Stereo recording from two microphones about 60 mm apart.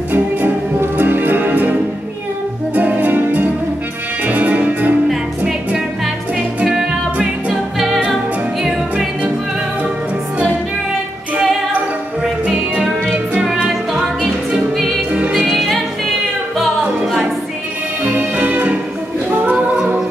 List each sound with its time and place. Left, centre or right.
0.1 s music: right
6.6 s music: centre
11.3 s music: centre
13.9 s music: centre
15.3 s music: centre
16.8 s music: centre
18.1 s music: right
19.3 s a capella: right